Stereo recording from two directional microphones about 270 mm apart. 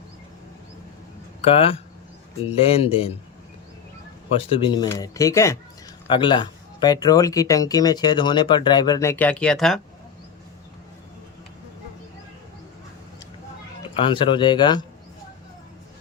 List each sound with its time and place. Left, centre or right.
1.4 s speech: left
4.4 s speech: centre
13.9 s speech: centre